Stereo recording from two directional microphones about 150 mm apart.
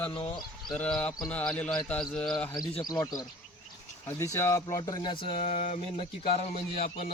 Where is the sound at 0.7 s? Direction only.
5° left (ahead or behind).